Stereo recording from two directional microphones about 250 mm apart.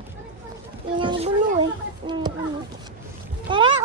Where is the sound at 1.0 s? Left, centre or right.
Centre.